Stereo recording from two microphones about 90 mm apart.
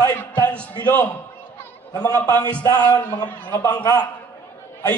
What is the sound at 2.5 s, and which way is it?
Music, 50° left (ahead or behind).